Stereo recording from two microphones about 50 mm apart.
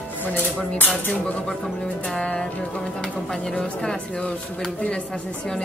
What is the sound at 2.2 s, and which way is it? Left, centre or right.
A woman's voice, centre.